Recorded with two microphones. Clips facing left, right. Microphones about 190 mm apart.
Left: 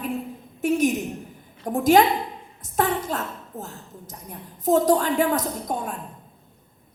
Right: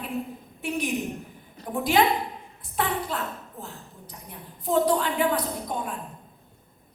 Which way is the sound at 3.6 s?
45° left (ahead or behind).